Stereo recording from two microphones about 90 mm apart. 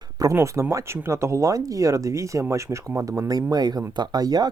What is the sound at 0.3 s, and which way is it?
Speech, 30° right (ahead or behind).